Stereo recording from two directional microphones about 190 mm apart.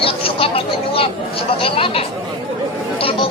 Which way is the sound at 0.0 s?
30° left (ahead or behind).